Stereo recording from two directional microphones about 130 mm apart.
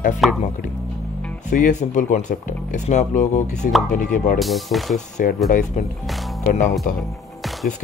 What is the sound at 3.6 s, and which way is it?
Speech, 90° left.